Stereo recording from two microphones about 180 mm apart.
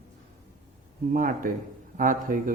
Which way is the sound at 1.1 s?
50° right (ahead or behind).